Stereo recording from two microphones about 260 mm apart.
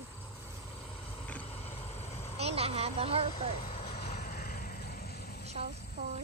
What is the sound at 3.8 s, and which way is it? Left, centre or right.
Vehicle, left.